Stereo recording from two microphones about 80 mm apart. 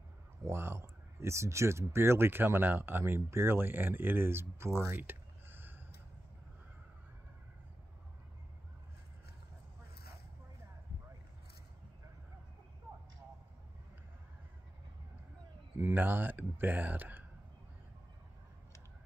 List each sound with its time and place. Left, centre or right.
0.5 s speech: right
15.8 s speech: right